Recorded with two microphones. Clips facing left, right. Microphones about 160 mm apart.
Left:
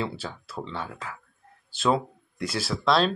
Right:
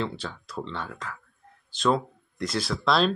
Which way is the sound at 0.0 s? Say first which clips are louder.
Even; 10° left (ahead or behind).